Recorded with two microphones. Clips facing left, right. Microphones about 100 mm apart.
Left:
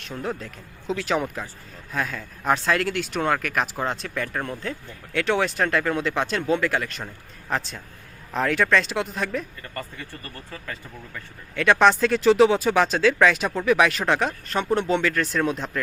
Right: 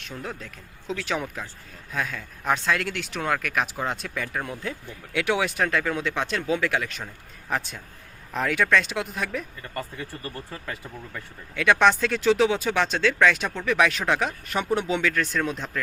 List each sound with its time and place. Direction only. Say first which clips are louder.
0.0 s speech: left 5 dB; centre (ahead or behind)
10.2 s speech: right 2 dB; 15° right (ahead or behind)
11.1 s speech: left 1 dB; centre (ahead or behind)